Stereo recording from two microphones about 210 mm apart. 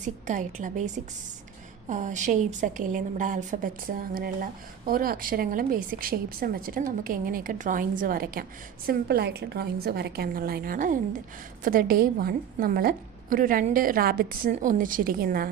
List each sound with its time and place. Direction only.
0.0 s a woman's voice: 35° right (ahead or behind)